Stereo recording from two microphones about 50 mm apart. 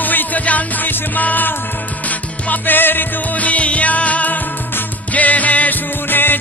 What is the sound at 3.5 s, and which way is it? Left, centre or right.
Music, left.